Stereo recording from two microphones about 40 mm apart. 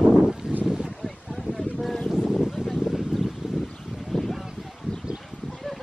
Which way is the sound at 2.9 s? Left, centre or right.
Centre.